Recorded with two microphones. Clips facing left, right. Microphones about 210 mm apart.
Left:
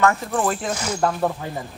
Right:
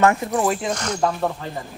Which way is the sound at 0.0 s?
20° right (ahead or behind).